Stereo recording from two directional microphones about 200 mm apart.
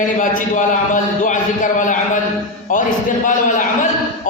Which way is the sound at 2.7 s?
40° left (ahead or behind).